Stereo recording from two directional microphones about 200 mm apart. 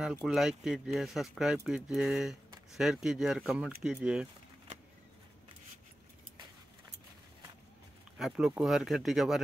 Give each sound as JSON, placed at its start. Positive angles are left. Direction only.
{"t": 0.0, "sound": "speech", "side_deg": 0}
{"t": 8.2, "sound": "speech", "side_deg": 0}